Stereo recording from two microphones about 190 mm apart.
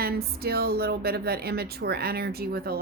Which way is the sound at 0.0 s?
55° right (ahead or behind).